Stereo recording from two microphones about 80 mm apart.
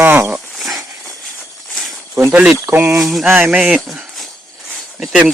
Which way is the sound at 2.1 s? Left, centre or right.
Right.